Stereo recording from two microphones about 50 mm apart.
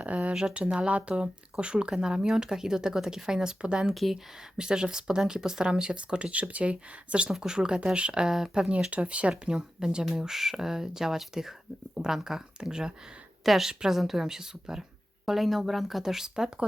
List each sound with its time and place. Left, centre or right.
0.0 s a sound: right
0.3 s speech: centre
3.9 s speech: centre
4.5 s speech: centre
9.0 s speech: right
9.3 s a woman's voice: centre